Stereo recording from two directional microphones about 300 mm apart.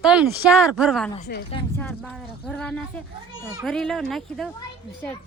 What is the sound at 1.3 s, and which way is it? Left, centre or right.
Speech, left.